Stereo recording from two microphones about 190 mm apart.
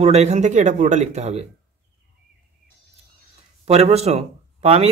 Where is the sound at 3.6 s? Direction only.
30° right (ahead or behind).